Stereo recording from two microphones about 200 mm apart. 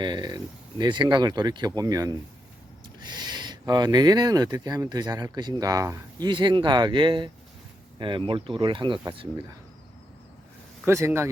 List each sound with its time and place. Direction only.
0.0 s speech: 20° right (ahead or behind)
10.8 s speech: 15° right (ahead or behind)